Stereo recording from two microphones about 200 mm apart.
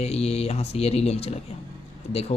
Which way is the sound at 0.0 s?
30° left (ahead or behind).